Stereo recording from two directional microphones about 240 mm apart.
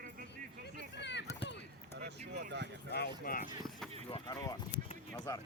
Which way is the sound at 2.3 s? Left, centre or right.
Right.